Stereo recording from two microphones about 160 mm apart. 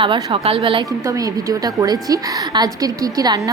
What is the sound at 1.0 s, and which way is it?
A woman's voice, 20° right (ahead or behind).